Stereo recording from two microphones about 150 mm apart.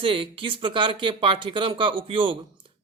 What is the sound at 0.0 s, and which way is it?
Speech, 35° right (ahead or behind).